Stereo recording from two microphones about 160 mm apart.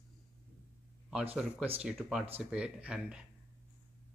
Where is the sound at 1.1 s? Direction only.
10° right (ahead or behind).